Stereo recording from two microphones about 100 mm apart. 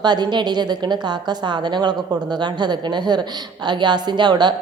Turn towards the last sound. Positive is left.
turn(degrees=-45)  # may be behind; listen again after turning